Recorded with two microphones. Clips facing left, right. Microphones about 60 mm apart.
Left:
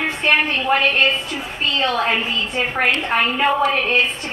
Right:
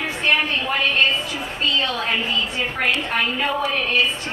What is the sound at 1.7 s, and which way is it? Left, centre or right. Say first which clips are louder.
A woman's voice: left 7 dB; left.